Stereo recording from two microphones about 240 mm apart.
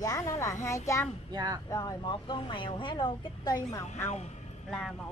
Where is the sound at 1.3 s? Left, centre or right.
Centre.